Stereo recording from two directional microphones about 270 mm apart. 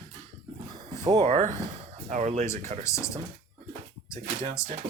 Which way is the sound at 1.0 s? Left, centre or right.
Right.